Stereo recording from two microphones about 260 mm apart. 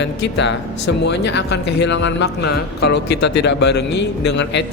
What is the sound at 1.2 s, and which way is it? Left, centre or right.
Speech, left.